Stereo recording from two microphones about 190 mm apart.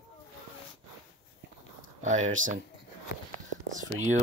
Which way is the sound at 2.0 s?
40° right (ahead or behind).